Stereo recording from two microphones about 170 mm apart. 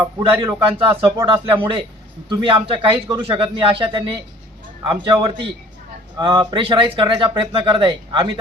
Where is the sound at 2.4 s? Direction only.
30° right (ahead or behind).